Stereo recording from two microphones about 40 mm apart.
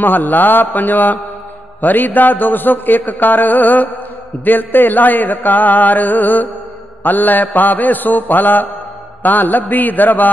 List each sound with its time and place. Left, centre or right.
0.0 s mantra: left